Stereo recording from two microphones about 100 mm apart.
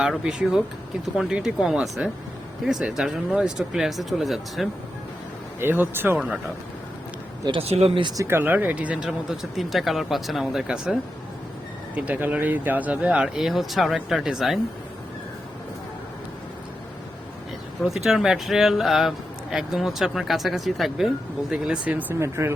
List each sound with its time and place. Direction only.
0.0 s speech: 5° right (ahead or behind)
5.5 s speech: 20° right (ahead or behind)
6.1 s speech: 5° right (ahead or behind)
7.6 s speech: 90° right
8.1 s speech: 30° right (ahead or behind); by 10.9 s 5° right (ahead or behind)
11.9 s speech: 15° right (ahead or behind)
17.8 s speech: centre (ahead or behind)
21.5 s speech: 10° right (ahead or behind)
22.1 s speech: 25° right (ahead or behind)